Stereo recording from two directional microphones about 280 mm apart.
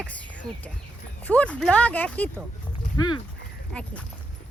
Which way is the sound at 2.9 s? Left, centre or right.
Centre.